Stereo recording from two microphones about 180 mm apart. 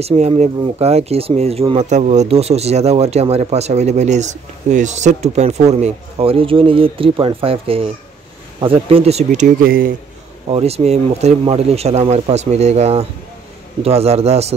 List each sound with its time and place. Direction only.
0.0 s speech: 35° right (ahead or behind)
9.6 s speech: 55° right (ahead or behind)
10.5 s speech: 35° right (ahead or behind)